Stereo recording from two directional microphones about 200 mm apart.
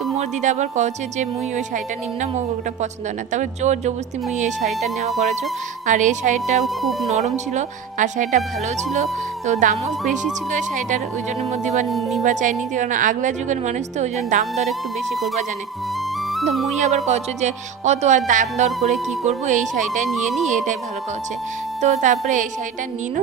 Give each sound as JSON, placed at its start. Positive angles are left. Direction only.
{"t": 0.2, "sound": "a woman's voice", "side_deg": -35}
{"t": 3.3, "sound": "a woman's voice", "side_deg": -35}
{"t": 5.8, "sound": "a woman's voice", "side_deg": -40}
{"t": 6.6, "sound": "speech", "side_deg": 0}
{"t": 7.5, "sound": "a woman's voice", "side_deg": -40}
{"t": 9.5, "sound": "a woman's voice", "side_deg": -35}
{"t": 11.9, "sound": "speech", "side_deg": 0}
{"t": 12.2, "sound": "a woman's voice", "side_deg": -40}
{"t": 14.7, "sound": "speech", "side_deg": 0}
{"t": 16.7, "sound": "a woman's voice", "side_deg": -35}
{"t": 21.8, "sound": "a woman's voice", "side_deg": -35}